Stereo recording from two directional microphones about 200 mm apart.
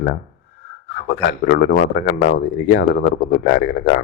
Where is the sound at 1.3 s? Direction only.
55° left (ahead or behind).